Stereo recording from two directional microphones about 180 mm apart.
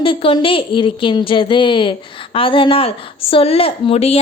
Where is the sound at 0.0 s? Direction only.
30° left (ahead or behind).